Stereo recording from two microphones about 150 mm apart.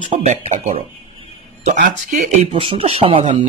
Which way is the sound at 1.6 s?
60° right (ahead or behind).